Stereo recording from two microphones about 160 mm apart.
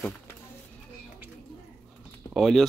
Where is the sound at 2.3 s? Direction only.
Centre (ahead or behind).